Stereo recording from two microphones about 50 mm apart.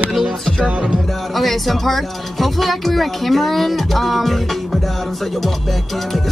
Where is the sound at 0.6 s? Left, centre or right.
Right.